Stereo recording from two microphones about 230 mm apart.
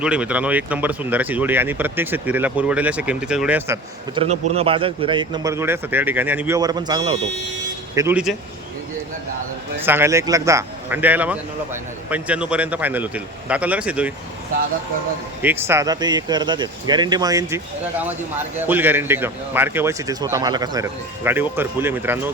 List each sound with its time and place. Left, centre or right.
0.0 s speech: centre
4.1 s speech: right
7.9 s a man's voice: centre
9.8 s a man's voice: centre
15.4 s speech: centre
18.6 s speech: centre